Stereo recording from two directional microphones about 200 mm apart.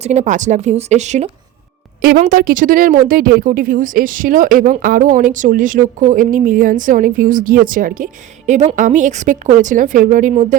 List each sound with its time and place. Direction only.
0.0 s speech: 35° right (ahead or behind)
2.0 s speech: 45° right (ahead or behind)